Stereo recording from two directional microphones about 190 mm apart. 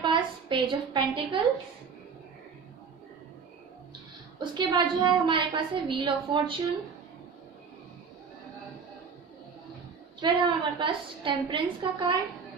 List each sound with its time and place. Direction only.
0.0 s a woman's voice: 25° right (ahead or behind)
4.4 s a woman's voice: 20° right (ahead or behind)
10.2 s a woman's voice: 25° right (ahead or behind)